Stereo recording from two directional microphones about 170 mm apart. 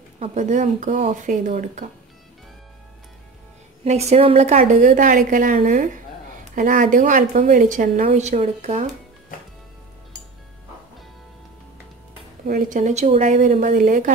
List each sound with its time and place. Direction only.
0.2 s a woman's voice: 45° right (ahead or behind)
3.8 s a woman's voice: 40° right (ahead or behind)
12.4 s a woman's voice: 55° right (ahead or behind)